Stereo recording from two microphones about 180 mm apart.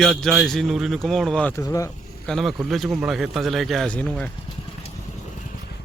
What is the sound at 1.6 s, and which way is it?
Speech, 15° left (ahead or behind).